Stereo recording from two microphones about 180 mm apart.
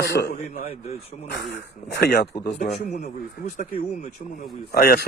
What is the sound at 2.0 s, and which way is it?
Speech, 60° left (ahead or behind).